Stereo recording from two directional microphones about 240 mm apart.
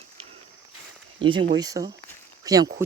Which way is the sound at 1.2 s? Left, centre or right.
Right.